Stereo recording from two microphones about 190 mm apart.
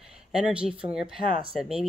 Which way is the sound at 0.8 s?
25° right (ahead or behind).